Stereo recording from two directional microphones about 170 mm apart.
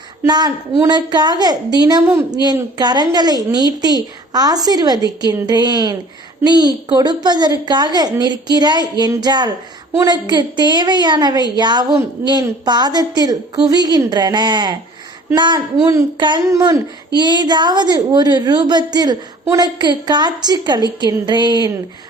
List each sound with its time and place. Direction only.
0.3 s a woman's voice: 25° right (ahead or behind)